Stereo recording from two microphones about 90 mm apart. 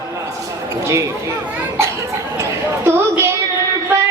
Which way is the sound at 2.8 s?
30° right (ahead or behind).